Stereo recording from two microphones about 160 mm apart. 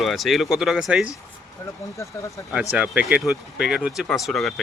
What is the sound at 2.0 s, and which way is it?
Speech, 20° left (ahead or behind).